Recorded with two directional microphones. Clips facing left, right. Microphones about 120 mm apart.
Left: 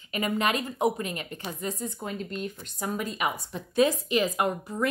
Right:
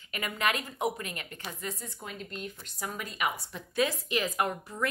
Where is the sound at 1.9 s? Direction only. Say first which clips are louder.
Left 7 dB; 35° left (ahead or behind).